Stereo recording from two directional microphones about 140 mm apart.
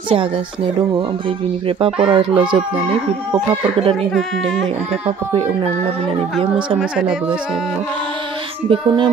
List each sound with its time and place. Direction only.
1.8 s speech: 40° right (ahead or behind)
6.8 s speech: 5° right (ahead or behind)
8.6 s speech: 35° right (ahead or behind)